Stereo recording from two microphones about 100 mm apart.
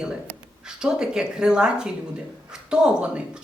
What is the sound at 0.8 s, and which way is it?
Speech, 5° right (ahead or behind).